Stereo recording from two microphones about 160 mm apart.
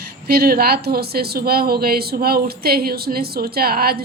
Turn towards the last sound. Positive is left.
turn(degrees=-70)  # may be behind; listen again after turning